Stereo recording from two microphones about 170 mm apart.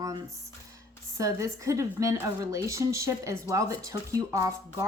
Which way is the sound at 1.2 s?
15° right (ahead or behind).